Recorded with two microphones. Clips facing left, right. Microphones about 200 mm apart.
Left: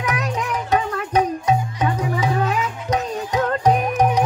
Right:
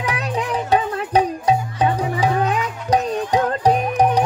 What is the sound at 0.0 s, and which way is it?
Music, 30° right (ahead or behind).